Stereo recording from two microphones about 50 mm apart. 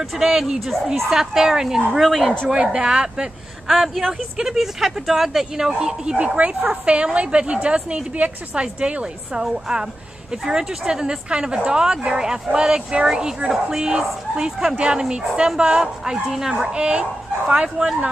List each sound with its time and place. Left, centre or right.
0.0 s speech: centre
2.5 s speech: centre
3.6 s speech: centre
6.1 s a woman's voice: right